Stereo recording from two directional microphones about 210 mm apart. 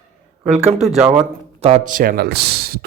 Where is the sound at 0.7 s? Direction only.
30° right (ahead or behind).